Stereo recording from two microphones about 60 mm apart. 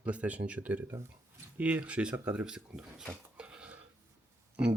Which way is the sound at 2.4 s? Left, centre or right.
Centre.